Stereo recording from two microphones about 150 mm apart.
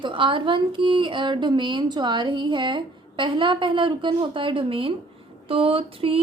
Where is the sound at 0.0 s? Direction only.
35° right (ahead or behind).